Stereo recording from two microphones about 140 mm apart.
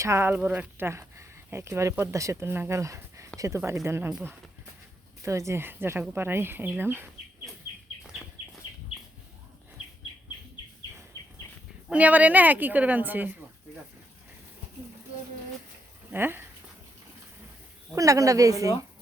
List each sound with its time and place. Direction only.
0.0 s speech: 20° right (ahead or behind)
5.2 s speech: 20° right (ahead or behind)
11.9 s speech: 10° right (ahead or behind)
16.1 s speech: 15° right (ahead or behind)
17.9 s speech: 25° right (ahead or behind)